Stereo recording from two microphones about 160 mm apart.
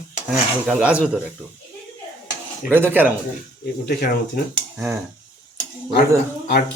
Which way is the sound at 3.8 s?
70° left (ahead or behind).